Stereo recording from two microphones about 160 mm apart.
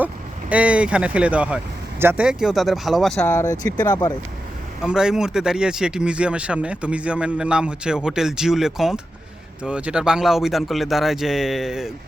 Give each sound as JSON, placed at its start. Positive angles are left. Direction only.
{"t": 0.5, "sound": "speech", "side_deg": -10}
{"t": 3.2, "sound": "speech", "side_deg": 15}
{"t": 4.8, "sound": "speech", "side_deg": -5}